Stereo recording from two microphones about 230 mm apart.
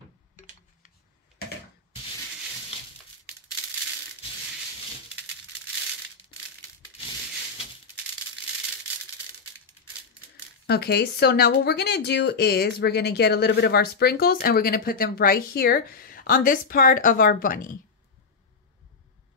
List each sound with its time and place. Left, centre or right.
10.7 s speech: left